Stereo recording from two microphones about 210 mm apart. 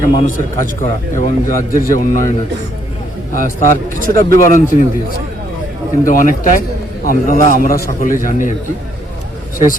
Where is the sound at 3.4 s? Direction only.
40° left (ahead or behind).